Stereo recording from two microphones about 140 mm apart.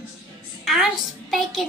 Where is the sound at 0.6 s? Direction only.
Centre (ahead or behind).